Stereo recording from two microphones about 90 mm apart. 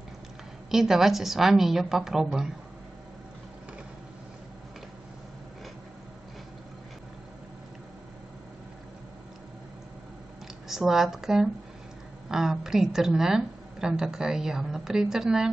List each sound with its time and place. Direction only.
0.7 s a woman's voice: 5° right (ahead or behind)
10.7 s a woman's voice: 5° right (ahead or behind)